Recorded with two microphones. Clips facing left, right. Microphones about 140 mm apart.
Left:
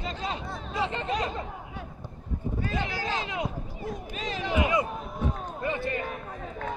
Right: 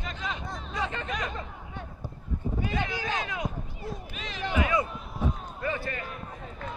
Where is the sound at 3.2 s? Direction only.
25° left (ahead or behind).